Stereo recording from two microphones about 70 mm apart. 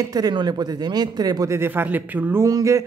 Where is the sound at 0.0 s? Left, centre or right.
Right.